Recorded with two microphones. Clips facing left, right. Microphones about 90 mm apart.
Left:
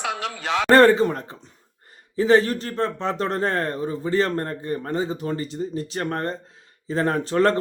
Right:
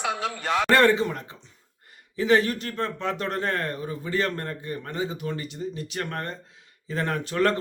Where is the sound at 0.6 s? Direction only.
35° left (ahead or behind).